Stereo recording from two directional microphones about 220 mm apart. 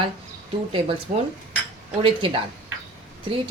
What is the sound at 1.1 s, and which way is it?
Speech, 35° right (ahead or behind).